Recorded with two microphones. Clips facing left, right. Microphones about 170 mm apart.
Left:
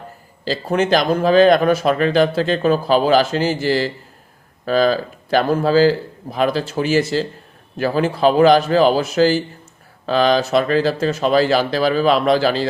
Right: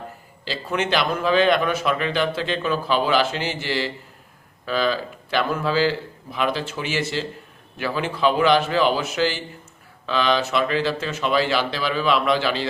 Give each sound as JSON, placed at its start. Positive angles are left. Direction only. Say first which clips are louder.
{"t": 0.4, "sound": "a man's voice", "louder": "left 7 dB", "side_deg": 40}